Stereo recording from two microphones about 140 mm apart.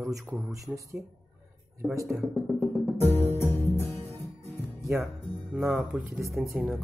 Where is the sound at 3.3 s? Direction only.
15° left (ahead or behind).